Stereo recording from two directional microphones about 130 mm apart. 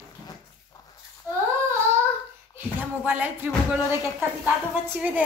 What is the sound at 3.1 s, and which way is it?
Speech, 10° right (ahead or behind).